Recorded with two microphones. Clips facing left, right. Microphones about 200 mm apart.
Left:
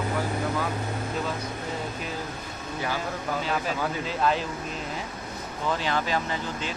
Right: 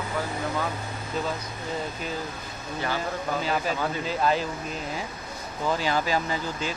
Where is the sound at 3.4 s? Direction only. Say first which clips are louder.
Right 1 dB; centre (ahead or behind).